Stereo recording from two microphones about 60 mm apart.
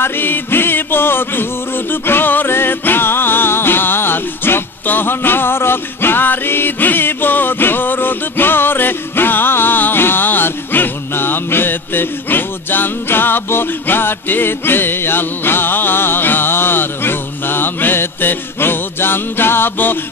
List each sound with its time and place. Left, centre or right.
0.0 s music: left